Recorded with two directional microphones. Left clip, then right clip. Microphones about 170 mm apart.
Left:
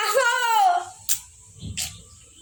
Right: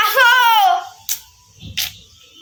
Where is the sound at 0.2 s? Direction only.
20° left (ahead or behind).